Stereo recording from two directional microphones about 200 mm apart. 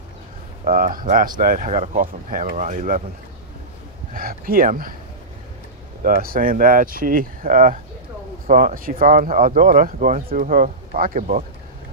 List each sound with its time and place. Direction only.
0.7 s speech: 45° right (ahead or behind)
4.1 s speech: 45° right (ahead or behind)
6.0 s speech: 45° right (ahead or behind)